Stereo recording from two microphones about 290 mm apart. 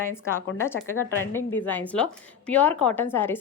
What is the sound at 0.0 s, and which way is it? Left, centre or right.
Speech, centre.